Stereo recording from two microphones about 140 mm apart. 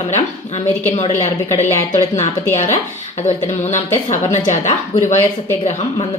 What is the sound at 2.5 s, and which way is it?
A woman's voice, 55° left (ahead or behind).